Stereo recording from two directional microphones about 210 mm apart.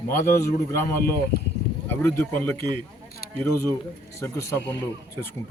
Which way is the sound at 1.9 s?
10° left (ahead or behind).